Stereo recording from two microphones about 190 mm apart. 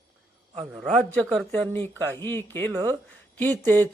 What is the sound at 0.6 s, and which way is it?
A man's voice, 5° right (ahead or behind).